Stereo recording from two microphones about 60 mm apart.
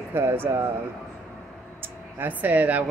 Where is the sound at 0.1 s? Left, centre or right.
Right.